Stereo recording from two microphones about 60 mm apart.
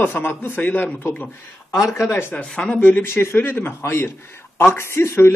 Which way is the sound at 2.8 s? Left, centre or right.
Left.